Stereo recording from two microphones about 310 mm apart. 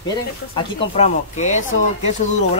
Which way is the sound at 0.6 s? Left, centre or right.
Centre.